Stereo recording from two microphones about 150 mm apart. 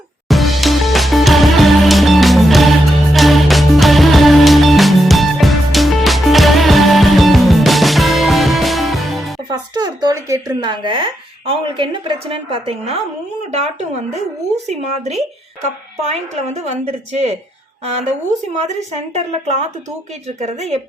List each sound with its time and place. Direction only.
0.3 s music: centre (ahead or behind)
9.5 s a woman's voice: 30° right (ahead or behind); by 17.3 s 45° right (ahead or behind)
18.6 s a woman's voice: 50° right (ahead or behind)